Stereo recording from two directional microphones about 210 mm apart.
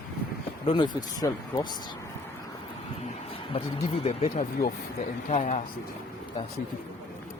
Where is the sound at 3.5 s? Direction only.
30° left (ahead or behind).